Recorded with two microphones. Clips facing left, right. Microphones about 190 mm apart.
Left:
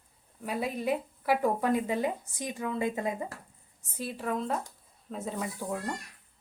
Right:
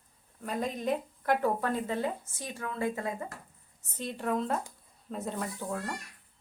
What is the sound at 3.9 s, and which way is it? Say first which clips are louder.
A woman's voice: right 1 dB; 5° left (ahead or behind).